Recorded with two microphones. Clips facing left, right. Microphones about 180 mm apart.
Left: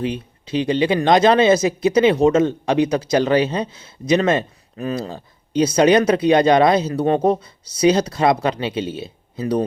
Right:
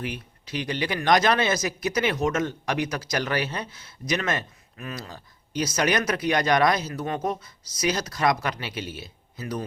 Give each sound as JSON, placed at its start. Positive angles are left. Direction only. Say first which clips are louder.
{"t": 0.0, "sound": "speech", "louder": "left 9 dB", "side_deg": 25}